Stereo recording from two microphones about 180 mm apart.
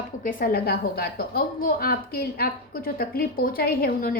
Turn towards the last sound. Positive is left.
turn(degrees=55)  # may be behind; listen again after turning